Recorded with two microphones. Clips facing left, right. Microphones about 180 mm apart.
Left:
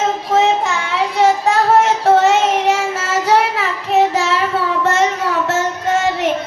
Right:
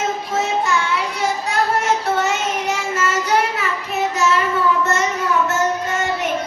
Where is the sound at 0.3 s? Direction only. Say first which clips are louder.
Left 5 dB; 90° left.